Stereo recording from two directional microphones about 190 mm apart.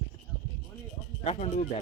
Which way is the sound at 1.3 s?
35° left (ahead or behind).